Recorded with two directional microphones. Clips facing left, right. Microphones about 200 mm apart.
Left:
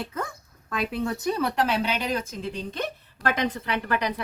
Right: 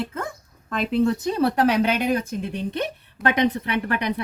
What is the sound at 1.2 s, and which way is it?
A woman's voice, 30° right (ahead or behind).